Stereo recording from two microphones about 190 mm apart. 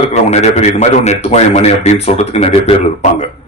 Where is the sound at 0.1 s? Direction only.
35° left (ahead or behind).